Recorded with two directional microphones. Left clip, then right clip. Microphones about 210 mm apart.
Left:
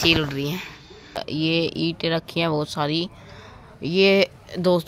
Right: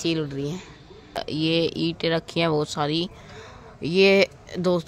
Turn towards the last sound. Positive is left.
turn(degrees=5)  # may be behind; listen again after turning